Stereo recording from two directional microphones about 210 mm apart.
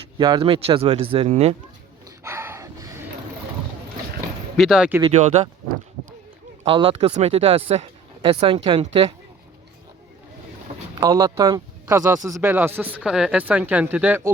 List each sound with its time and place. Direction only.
0.2 s speech: 20° right (ahead or behind)
2.0 s a sound: 15° right (ahead or behind)
4.5 s speech: centre (ahead or behind)
5.0 s speech: 30° right (ahead or behind)
6.7 s speech: 25° right (ahead or behind)
11.1 s speech: 15° right (ahead or behind)